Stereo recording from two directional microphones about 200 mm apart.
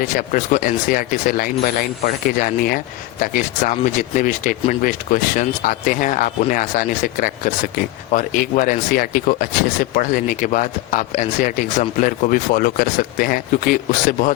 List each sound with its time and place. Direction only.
0.0 s speech: 40° left (ahead or behind)